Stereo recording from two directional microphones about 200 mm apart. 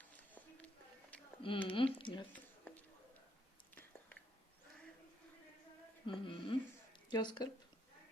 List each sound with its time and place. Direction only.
0.2 s a sound: 10° left (ahead or behind)
1.4 s speech: 25° left (ahead or behind)
6.1 s music: 25° left (ahead or behind)
7.1 s speech: 20° left (ahead or behind)